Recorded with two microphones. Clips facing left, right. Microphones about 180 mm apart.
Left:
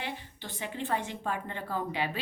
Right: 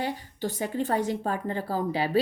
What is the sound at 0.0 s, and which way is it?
A woman's voice, 40° right (ahead or behind).